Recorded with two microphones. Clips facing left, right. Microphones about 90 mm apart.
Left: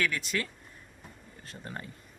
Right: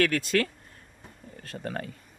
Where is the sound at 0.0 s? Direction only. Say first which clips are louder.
Right 7 dB; 70° right (ahead or behind).